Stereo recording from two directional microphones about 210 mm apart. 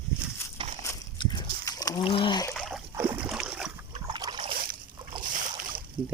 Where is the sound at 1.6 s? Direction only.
15° left (ahead or behind).